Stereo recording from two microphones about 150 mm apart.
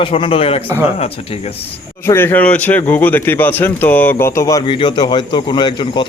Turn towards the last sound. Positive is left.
turn(degrees=30)  # may be behind; listen again after turning